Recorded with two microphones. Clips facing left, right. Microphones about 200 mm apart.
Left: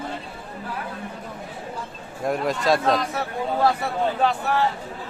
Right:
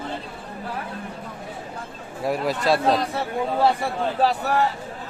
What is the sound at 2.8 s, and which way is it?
Speech, 30° right (ahead or behind).